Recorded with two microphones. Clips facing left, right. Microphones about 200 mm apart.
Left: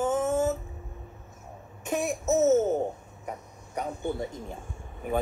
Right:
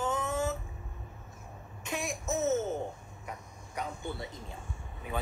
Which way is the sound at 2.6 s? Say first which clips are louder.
Left 8 dB; 40° left (ahead or behind).